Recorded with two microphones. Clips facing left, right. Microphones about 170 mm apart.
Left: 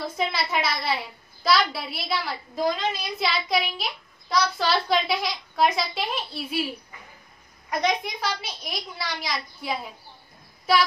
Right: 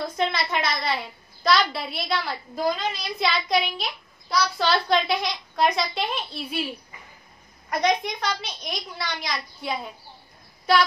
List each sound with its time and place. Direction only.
0.0 s a woman's voice: 5° left (ahead or behind)
7.8 s a woman's voice: 5° left (ahead or behind)